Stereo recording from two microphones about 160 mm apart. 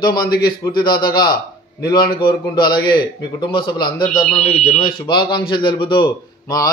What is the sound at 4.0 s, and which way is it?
Speech, 60° left (ahead or behind).